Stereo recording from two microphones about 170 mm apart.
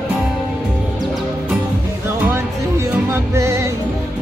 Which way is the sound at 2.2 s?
15° right (ahead or behind).